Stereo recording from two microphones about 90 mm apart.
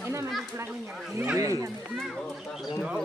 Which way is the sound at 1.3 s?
35° right (ahead or behind).